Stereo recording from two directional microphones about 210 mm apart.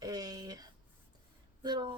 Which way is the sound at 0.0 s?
20° right (ahead or behind).